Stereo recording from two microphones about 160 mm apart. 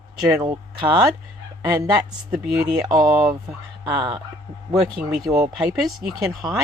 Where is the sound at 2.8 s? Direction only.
25° right (ahead or behind).